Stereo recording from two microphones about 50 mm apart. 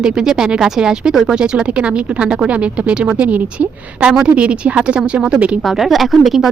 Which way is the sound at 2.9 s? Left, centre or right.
Right.